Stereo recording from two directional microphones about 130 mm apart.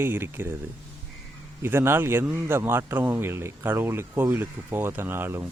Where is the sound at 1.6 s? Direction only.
20° right (ahead or behind).